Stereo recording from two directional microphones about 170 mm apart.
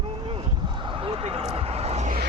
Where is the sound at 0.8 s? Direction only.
30° right (ahead or behind).